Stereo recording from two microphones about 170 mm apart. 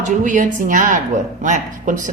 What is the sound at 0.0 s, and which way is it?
A woman's voice, 50° right (ahead or behind).